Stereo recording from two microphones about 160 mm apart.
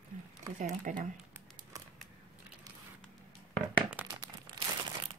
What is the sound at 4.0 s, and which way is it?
Crumpling, 10° right (ahead or behind).